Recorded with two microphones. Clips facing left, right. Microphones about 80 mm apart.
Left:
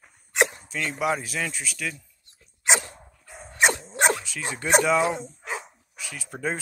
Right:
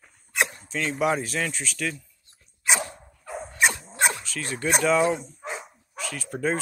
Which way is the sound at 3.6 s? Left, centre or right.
Left.